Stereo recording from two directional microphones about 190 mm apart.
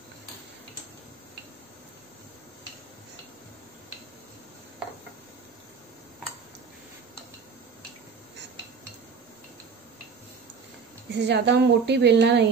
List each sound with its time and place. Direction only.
11.1 s a woman's voice: 65° right (ahead or behind)